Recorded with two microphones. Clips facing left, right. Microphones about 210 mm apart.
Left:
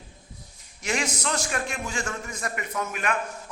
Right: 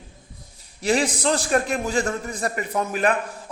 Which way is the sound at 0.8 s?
35° right (ahead or behind).